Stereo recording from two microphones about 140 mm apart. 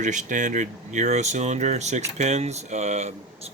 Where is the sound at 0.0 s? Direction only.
60° right (ahead or behind).